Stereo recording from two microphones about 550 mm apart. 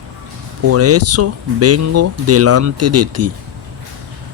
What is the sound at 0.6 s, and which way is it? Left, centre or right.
Speech, right.